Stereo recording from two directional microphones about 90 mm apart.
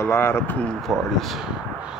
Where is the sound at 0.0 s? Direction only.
30° left (ahead or behind).